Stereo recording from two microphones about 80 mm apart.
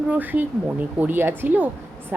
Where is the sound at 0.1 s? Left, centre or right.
Right.